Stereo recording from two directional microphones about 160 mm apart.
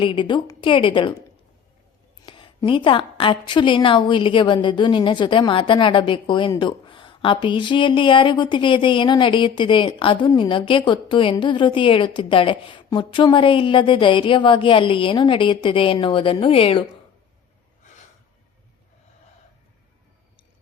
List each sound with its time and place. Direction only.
0.0 s speech: 30° left (ahead or behind)
2.2 s speech: 30° left (ahead or behind)